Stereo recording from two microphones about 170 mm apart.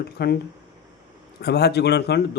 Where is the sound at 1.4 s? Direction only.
75° left (ahead or behind).